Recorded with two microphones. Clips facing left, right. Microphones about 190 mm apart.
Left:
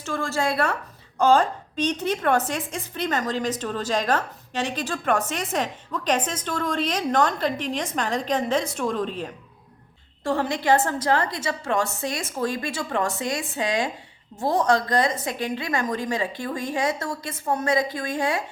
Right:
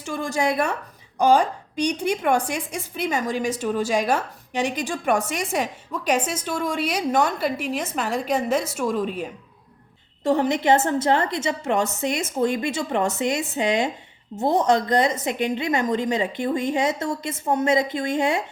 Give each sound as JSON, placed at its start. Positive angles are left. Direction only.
{"t": 0.0, "sound": "a woman's voice", "side_deg": -15}
{"t": 10.2, "sound": "a woman's voice", "side_deg": -20}